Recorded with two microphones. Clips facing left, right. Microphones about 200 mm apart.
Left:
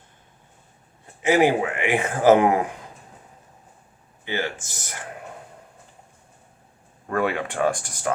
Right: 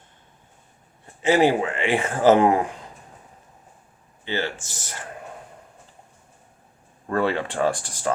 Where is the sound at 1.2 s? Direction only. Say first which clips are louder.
Even; 15° left (ahead or behind).